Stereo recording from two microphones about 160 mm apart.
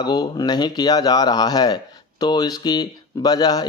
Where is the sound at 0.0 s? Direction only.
25° left (ahead or behind).